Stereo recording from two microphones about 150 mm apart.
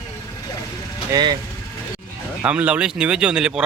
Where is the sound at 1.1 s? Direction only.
30° right (ahead or behind).